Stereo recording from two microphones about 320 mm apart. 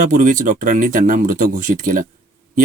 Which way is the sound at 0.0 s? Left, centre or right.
Right.